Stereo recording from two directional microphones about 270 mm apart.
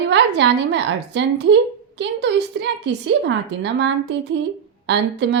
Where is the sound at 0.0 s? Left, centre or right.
Right.